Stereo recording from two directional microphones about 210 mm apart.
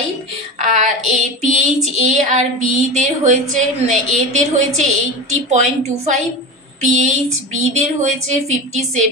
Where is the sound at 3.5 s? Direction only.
35° right (ahead or behind).